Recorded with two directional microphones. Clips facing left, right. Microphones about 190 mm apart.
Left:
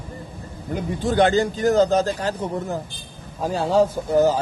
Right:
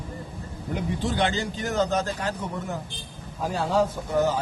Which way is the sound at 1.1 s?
45° left (ahead or behind).